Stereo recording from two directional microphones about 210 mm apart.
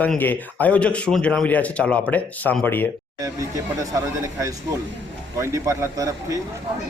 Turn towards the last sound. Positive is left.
turn(degrees=-15)  # may be behind; listen again after turning